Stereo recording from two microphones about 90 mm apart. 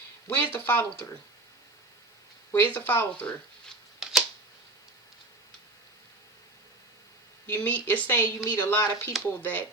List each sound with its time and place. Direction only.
0.3 s speech: 20° left (ahead or behind)
2.5 s speech: 20° left (ahead or behind)
4.0 s camera: 5° right (ahead or behind)
7.4 s speech: 20° left (ahead or behind)